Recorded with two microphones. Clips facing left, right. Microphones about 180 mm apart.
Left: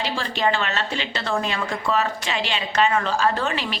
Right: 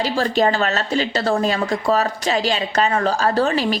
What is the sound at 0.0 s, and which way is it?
A woman's voice, 40° right (ahead or behind).